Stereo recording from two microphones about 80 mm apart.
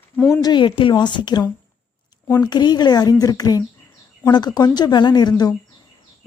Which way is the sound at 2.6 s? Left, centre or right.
Left.